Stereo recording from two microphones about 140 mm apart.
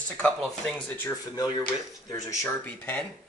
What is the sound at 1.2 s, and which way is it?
Speech, 25° left (ahead or behind).